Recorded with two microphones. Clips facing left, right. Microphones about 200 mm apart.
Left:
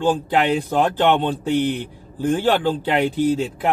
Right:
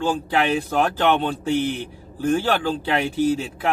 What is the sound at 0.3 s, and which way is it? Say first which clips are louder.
Speech: left 2 dB; 15° left (ahead or behind).